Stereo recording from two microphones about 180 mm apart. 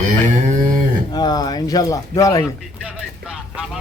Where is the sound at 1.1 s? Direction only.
20° left (ahead or behind).